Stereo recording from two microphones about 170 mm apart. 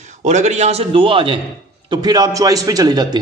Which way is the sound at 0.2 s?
45° right (ahead or behind).